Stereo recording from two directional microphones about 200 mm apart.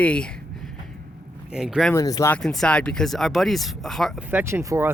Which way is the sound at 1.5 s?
5° right (ahead or behind).